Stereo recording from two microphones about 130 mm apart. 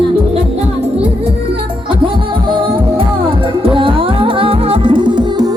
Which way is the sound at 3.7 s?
40° right (ahead or behind).